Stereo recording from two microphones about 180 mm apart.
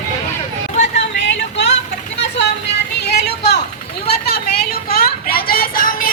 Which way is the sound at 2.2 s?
75° left (ahead or behind).